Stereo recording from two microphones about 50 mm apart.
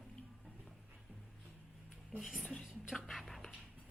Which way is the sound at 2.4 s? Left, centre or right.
Centre.